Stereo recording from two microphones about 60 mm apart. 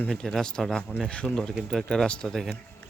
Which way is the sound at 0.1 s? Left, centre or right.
Centre.